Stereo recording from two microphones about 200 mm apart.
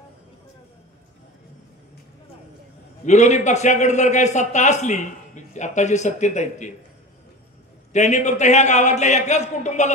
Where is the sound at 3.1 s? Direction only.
35° left (ahead or behind).